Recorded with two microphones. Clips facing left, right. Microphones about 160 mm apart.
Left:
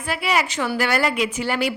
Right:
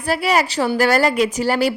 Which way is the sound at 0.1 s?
40° right (ahead or behind).